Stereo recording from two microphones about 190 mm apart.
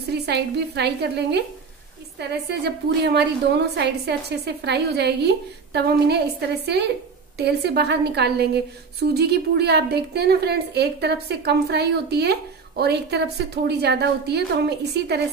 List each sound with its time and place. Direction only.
0.1 s a woman's voice: 60° right (ahead or behind)